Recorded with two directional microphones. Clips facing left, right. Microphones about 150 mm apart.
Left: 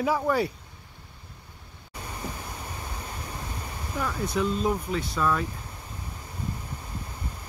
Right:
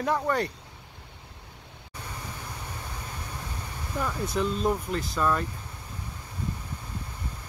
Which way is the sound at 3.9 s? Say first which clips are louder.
Left 1 dB; centre (ahead or behind).